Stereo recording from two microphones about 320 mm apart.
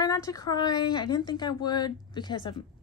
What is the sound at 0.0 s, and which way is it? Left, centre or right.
Speech, centre.